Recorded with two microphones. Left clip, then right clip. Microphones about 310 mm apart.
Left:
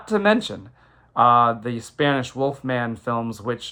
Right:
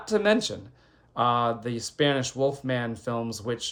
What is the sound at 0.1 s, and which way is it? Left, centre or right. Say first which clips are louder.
Speech: left 4 dB; centre.